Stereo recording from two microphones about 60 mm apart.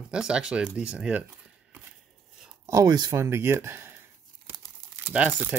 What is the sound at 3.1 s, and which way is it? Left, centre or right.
Speech, right.